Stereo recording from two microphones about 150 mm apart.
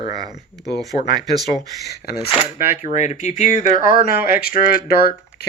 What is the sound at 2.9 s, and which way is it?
Speech, 55° left (ahead or behind).